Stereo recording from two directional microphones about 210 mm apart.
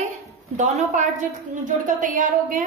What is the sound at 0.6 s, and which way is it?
A woman's voice, 35° right (ahead or behind).